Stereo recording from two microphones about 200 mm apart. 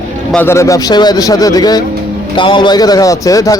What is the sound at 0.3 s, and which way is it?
A man's voice, 10° left (ahead or behind).